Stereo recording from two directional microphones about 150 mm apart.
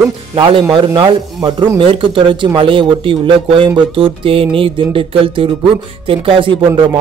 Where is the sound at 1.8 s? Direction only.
35° right (ahead or behind).